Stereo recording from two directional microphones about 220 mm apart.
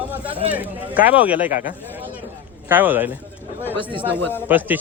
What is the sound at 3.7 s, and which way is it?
Speech, 25° right (ahead or behind).